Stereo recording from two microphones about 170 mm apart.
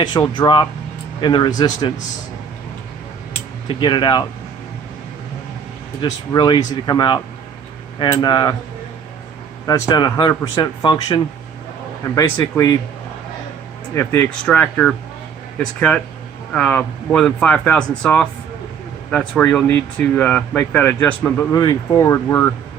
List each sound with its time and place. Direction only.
0.0 s speech: 25° left (ahead or behind)
3.7 s speech: 30° left (ahead or behind)
6.0 s speech: 25° left (ahead or behind)
9.6 s speech: 25° left (ahead or behind)
13.9 s speech: 15° left (ahead or behind)
16.5 s speech: 10° left (ahead or behind)
21.5 s speech: 20° left (ahead or behind)